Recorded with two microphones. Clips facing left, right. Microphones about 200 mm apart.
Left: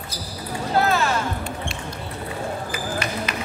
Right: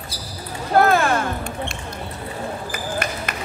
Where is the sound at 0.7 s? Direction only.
55° right (ahead or behind).